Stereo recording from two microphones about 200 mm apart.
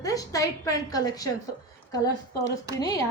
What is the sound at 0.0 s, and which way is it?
A woman's voice, 15° left (ahead or behind).